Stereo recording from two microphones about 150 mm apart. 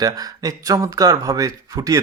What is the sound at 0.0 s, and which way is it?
Speech, 25° right (ahead or behind).